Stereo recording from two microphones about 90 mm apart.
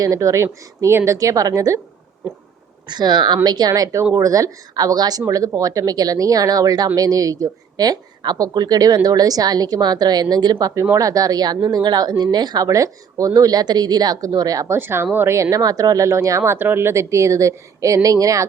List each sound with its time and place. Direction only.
0.0 s a woman's voice: 40° right (ahead or behind)
2.8 s a woman's voice: 50° right (ahead or behind)
14.8 s a woman's voice: 25° right (ahead or behind)
16.4 s a woman's voice: 25° right (ahead or behind); by 18.4 s 40° right (ahead or behind)